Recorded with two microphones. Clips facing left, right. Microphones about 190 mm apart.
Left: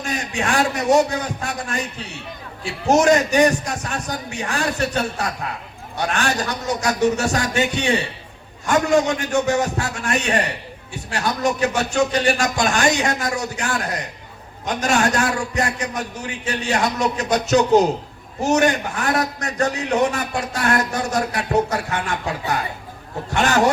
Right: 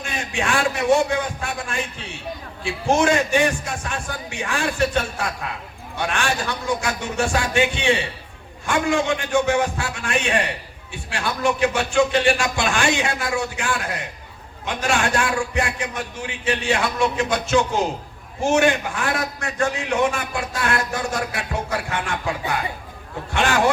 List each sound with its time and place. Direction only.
0.0 s a man's voice: 40° left (ahead or behind)
2.8 s a man's voice: 40° left (ahead or behind)
6.0 s a man's voice: 40° left (ahead or behind)
23.3 s a man's voice: 40° left (ahead or behind)